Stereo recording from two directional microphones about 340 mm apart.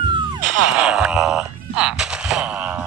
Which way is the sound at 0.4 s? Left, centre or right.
Right.